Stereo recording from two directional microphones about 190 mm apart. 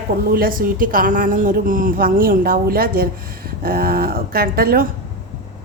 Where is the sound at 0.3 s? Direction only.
50° right (ahead or behind).